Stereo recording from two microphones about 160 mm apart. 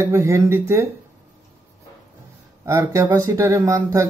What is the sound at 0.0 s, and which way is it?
Speech, 20° right (ahead or behind).